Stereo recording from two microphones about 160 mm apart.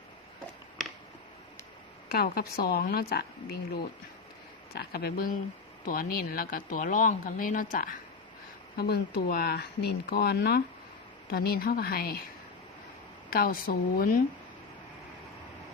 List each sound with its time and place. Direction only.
2.1 s speech: 70° left (ahead or behind)
8.7 s speech: 85° left; by 12.2 s 70° left (ahead or behind)
13.3 s speech: 65° left (ahead or behind)